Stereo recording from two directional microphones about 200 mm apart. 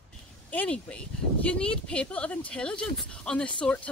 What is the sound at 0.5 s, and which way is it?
Speech, 5° left (ahead or behind).